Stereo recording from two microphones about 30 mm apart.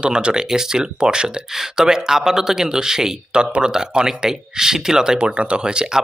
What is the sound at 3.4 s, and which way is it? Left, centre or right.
Speech, right.